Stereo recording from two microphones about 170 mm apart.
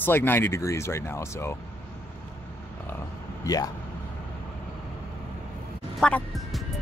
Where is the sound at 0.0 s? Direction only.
10° left (ahead or behind).